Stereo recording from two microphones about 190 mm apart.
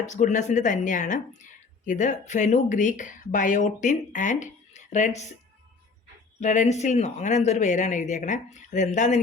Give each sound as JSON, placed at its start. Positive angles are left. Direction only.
{"t": 0.0, "sound": "speech", "side_deg": 40}
{"t": 6.4, "sound": "speech", "side_deg": 40}